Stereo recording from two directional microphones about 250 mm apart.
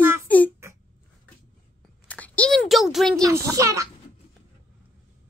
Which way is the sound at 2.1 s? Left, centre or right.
Centre.